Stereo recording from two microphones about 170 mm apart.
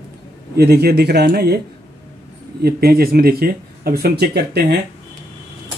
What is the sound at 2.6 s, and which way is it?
Speech, 65° right (ahead or behind).